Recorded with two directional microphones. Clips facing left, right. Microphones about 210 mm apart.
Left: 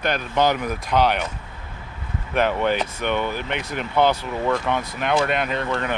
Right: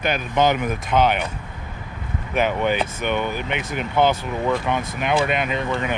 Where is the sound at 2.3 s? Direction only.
5° right (ahead or behind).